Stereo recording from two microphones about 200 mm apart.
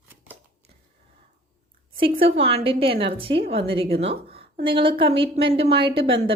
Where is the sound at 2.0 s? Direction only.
25° right (ahead or behind).